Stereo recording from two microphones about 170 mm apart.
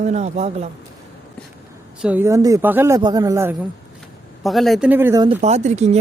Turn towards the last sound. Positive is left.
turn(degrees=-40)  # may be behind; listen again after turning